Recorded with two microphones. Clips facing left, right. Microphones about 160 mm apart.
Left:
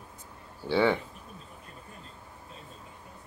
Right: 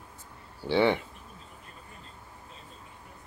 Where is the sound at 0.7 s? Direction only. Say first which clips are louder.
Right 1 dB; 15° right (ahead or behind).